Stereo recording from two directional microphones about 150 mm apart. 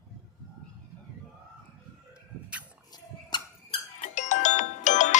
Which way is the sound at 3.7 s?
55° left (ahead or behind).